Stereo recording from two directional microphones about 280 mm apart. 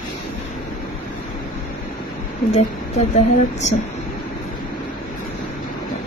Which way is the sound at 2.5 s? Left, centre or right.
Left.